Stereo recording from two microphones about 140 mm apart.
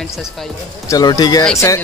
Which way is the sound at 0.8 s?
25° left (ahead or behind).